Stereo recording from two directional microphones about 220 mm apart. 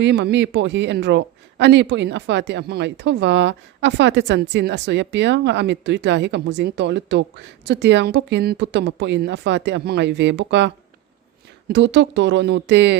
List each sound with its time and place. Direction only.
0.0 s speech: 50° right (ahead or behind)
11.7 s speech: 55° right (ahead or behind)